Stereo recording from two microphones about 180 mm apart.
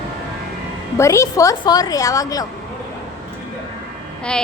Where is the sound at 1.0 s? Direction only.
15° left (ahead or behind).